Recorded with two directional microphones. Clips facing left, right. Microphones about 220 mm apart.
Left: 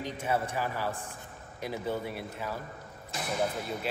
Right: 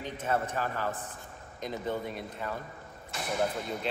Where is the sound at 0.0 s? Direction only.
10° left (ahead or behind).